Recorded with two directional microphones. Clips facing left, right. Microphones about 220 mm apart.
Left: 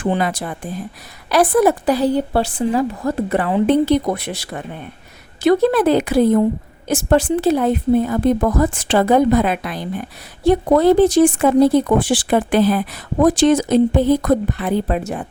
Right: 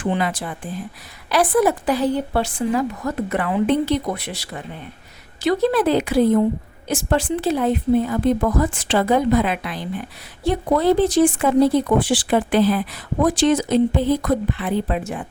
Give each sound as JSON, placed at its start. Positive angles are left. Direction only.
{"t": 0.0, "sound": "a woman's voice", "side_deg": 40}